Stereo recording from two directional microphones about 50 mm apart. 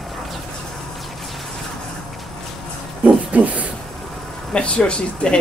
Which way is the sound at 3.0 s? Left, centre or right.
Right.